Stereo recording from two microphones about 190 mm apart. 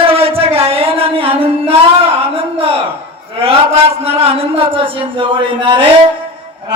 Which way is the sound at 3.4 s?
30° right (ahead or behind).